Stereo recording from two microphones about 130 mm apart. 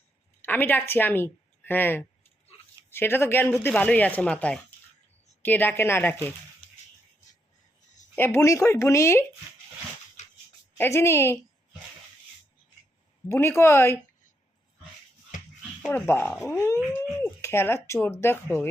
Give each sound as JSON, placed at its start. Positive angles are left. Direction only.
{"t": 0.4, "sound": "a woman's voice", "side_deg": 15}
{"t": 8.1, "sound": "speech", "side_deg": 20}
{"t": 10.2, "sound": "dog", "side_deg": 60}
{"t": 10.8, "sound": "speech", "side_deg": 20}
{"t": 13.2, "sound": "speech", "side_deg": 20}
{"t": 15.9, "sound": "speech", "side_deg": 15}